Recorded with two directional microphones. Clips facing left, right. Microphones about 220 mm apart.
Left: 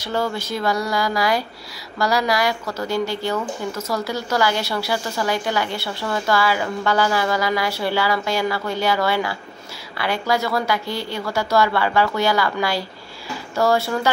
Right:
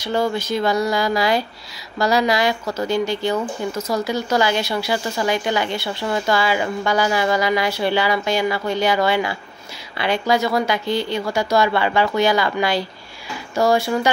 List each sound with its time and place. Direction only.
0.0 s a woman's voice: 15° right (ahead or behind)